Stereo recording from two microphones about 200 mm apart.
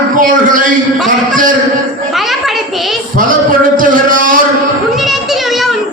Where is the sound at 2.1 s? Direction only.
Centre (ahead or behind).